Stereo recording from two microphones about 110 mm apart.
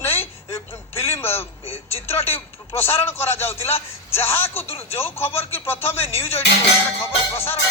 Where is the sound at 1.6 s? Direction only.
65° left (ahead or behind).